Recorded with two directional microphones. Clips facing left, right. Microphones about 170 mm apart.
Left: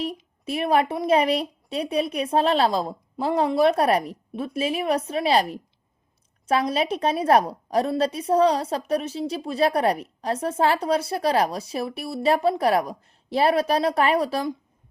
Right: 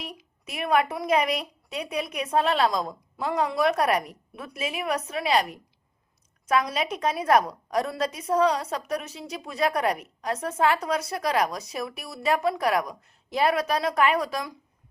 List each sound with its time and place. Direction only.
0.0 s a woman's voice: 30° left (ahead or behind)